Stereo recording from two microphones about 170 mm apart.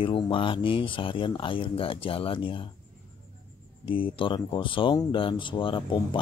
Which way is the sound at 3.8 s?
30° left (ahead or behind).